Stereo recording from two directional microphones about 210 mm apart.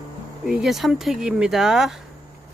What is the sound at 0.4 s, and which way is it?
Speech, centre (ahead or behind).